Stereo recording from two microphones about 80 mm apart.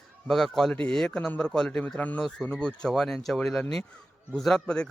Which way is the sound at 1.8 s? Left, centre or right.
Left.